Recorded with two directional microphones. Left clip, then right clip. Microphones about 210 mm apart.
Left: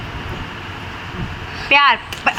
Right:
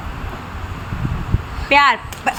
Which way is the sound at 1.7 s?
15° right (ahead or behind).